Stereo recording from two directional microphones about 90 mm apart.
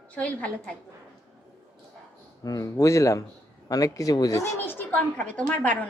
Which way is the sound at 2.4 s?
40° left (ahead or behind).